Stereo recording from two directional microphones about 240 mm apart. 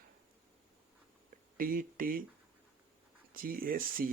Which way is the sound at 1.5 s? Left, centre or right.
Right.